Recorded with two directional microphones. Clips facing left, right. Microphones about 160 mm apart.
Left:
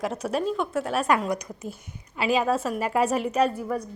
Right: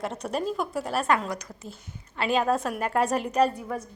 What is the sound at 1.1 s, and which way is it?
Speech, 15° left (ahead or behind).